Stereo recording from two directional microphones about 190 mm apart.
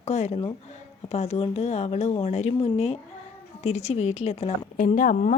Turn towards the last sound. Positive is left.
turn(degrees=40)  # may be behind; listen again after turning